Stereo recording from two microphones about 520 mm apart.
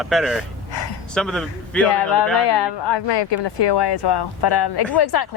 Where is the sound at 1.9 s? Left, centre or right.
Left.